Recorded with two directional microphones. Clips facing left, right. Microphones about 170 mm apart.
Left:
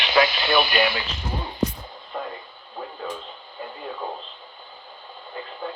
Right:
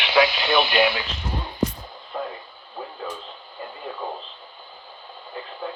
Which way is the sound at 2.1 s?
5° right (ahead or behind).